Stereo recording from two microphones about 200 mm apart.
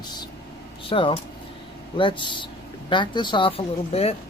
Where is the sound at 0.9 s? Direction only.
25° left (ahead or behind).